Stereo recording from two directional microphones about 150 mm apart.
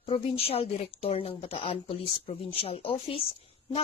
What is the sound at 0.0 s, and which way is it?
A woman's voice, 40° left (ahead or behind).